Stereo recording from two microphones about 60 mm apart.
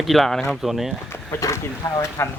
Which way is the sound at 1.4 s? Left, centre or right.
Left.